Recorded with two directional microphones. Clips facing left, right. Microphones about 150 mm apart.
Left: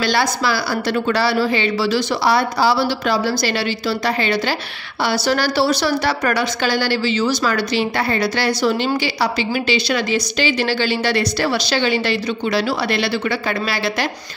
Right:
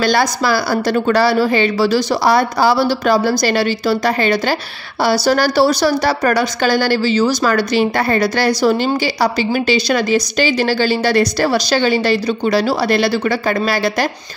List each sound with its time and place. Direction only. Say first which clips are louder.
0.0 s a woman's voice: right 3 dB; 45° right (ahead or behind)